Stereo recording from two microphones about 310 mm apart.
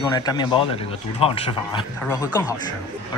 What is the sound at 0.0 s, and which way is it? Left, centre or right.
A man's voice, centre.